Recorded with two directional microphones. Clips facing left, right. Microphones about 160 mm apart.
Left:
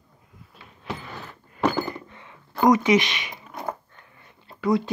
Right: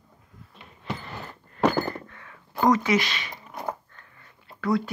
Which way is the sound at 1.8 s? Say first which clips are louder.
Right 1 dB; 15° left (ahead or behind).